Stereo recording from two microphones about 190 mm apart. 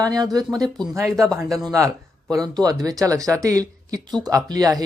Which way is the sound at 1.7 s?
15° right (ahead or behind).